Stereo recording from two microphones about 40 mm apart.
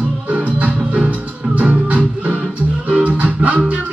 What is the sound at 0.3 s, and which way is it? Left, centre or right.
Music, right.